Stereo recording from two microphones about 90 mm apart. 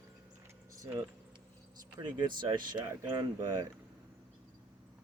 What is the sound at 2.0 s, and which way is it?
Speech, 60° right (ahead or behind).